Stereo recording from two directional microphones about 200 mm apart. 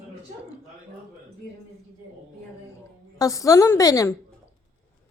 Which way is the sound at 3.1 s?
15° left (ahead or behind).